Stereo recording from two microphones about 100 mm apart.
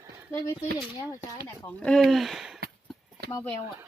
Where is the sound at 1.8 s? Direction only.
5° left (ahead or behind).